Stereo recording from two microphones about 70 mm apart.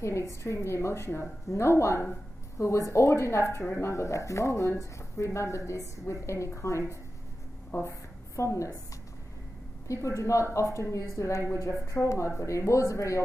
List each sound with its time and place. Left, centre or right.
0.0 s a woman's voice: left
9.8 s speech: left